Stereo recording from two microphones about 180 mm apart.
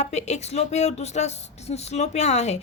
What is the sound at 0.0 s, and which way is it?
Speech, 40° left (ahead or behind).